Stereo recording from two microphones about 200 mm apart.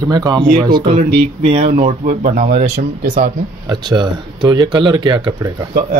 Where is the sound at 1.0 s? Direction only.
35° right (ahead or behind).